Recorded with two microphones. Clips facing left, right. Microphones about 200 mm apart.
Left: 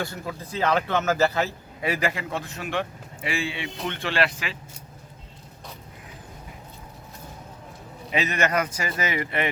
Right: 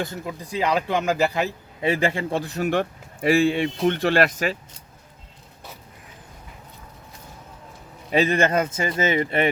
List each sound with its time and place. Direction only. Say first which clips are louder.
0.0 s a man's voice: right 2 dB; 20° right (ahead or behind); by 4.5 s 45° right (ahead or behind)
8.1 s a man's voice: right 5 dB; 30° right (ahead or behind)